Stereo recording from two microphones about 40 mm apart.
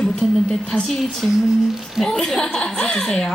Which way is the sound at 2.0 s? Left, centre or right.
Centre.